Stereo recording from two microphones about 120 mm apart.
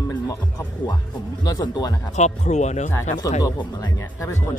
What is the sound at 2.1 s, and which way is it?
Speech, 75° left (ahead or behind).